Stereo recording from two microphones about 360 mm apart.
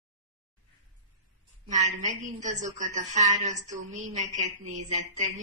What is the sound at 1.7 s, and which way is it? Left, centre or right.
A woman's voice, centre.